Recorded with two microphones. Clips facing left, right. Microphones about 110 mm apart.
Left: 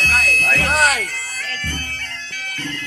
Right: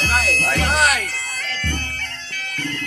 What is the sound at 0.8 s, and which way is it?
Bagpipes, 35° left (ahead or behind).